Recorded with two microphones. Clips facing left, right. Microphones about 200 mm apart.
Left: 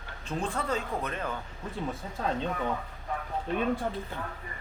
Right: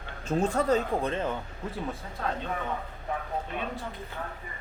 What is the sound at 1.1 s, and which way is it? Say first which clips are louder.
Speech: right 4 dB; 25° right (ahead or behind).